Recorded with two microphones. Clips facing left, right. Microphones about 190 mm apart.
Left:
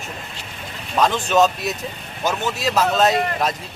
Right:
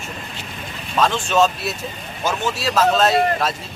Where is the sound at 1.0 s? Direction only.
15° left (ahead or behind).